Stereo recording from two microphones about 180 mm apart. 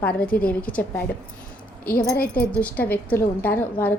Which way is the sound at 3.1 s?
10° left (ahead or behind).